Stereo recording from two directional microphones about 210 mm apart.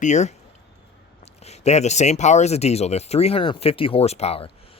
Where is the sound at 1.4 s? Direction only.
30° left (ahead or behind).